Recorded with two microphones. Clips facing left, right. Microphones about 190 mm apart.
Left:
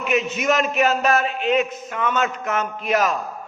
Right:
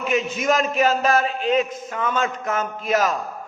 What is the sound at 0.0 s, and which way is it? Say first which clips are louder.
A man's voice: left 1 dB; 30° right (ahead or behind).